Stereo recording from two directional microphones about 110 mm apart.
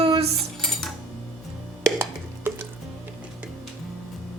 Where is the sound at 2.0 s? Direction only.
20° right (ahead or behind).